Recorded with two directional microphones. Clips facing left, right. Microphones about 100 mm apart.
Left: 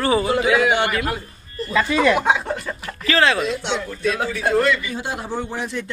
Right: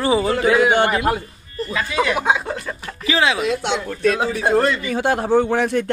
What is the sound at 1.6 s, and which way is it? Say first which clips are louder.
Speech: left 3 dB; 15° right (ahead or behind).